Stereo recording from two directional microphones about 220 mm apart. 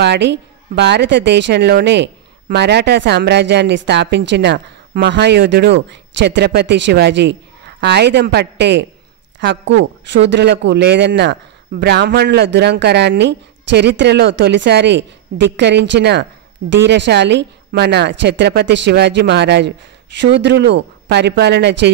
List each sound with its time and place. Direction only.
0.0 s speech: 50° right (ahead or behind)